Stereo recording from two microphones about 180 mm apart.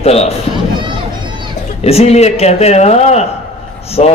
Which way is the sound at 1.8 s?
35° left (ahead or behind).